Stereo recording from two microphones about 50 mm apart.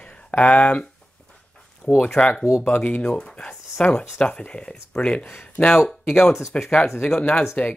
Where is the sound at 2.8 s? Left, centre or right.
Left.